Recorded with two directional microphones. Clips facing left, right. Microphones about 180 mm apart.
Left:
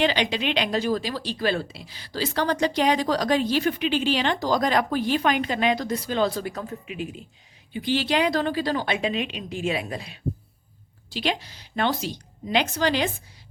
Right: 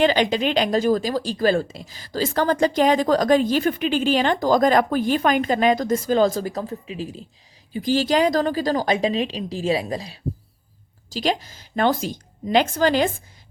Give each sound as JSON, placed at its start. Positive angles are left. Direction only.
{"t": 0.0, "sound": "a woman's voice", "side_deg": -45}